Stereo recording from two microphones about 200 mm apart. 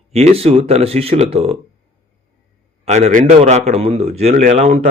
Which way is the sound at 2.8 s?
35° right (ahead or behind).